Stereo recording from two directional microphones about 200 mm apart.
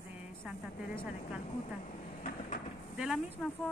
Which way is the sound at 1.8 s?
40° left (ahead or behind).